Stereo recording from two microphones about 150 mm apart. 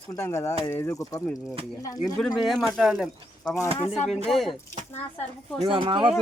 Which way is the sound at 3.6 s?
20° left (ahead or behind).